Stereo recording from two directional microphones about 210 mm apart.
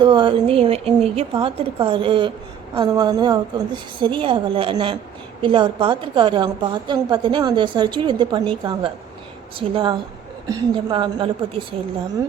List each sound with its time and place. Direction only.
0.0 s a woman's voice: 20° right (ahead or behind)